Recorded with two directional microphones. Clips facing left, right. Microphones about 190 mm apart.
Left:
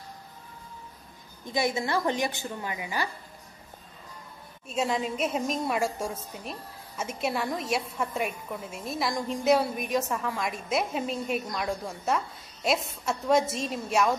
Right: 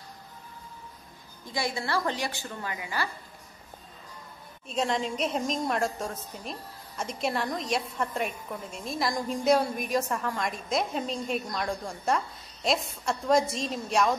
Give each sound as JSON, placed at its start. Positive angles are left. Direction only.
{"t": 1.4, "sound": "a woman's voice", "side_deg": 20}
{"t": 4.6, "sound": "a woman's voice", "side_deg": 5}